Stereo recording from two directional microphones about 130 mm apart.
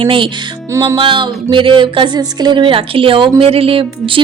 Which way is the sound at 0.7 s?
25° right (ahead or behind).